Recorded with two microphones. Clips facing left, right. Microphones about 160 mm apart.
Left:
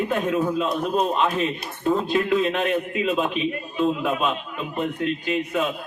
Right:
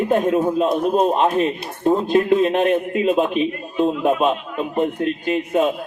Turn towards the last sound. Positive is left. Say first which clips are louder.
# right 5 dB
turn(degrees=-45)  # may be behind; listen again after turning